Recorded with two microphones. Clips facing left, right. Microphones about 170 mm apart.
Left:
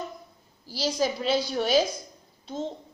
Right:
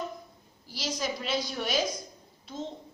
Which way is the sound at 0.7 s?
30° left (ahead or behind).